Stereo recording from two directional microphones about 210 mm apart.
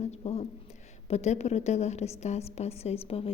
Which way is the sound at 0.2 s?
30° left (ahead or behind).